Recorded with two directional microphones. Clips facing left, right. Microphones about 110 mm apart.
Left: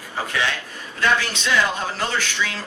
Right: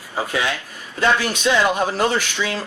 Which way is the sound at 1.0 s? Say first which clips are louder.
Right 3 dB; 20° right (ahead or behind).